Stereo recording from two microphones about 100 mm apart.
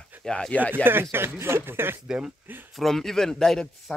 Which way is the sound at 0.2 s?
5° left (ahead or behind).